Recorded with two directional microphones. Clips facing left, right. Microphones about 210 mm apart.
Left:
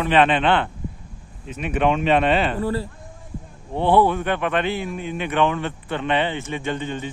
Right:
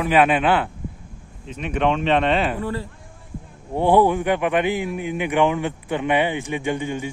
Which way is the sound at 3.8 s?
15° right (ahead or behind).